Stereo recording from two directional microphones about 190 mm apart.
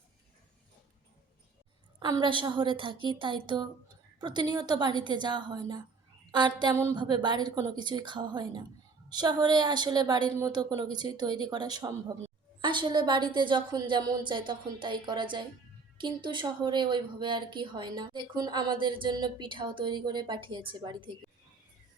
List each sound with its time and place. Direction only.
2.0 s speech: 25° right (ahead or behind)